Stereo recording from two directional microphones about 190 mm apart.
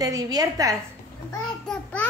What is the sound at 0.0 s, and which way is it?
Speech, 20° right (ahead or behind).